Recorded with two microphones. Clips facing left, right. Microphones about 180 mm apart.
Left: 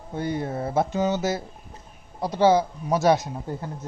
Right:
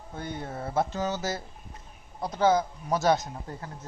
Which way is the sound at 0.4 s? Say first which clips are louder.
Left 7 dB; 5° left (ahead or behind).